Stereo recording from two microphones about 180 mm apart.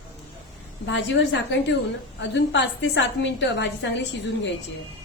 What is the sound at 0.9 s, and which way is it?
A woman's voice, 80° left.